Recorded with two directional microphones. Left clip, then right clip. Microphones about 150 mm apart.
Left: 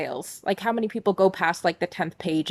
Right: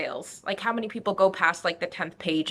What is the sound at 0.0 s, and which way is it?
Speech, 40° left (ahead or behind).